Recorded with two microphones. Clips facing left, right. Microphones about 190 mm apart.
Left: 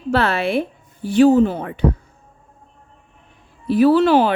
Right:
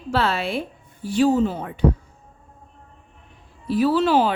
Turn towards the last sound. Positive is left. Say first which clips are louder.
# left 5 dB
turn(degrees=60)  # may be behind; listen again after turning